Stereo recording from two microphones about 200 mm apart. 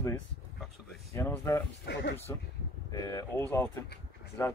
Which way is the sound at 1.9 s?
60° left (ahead or behind).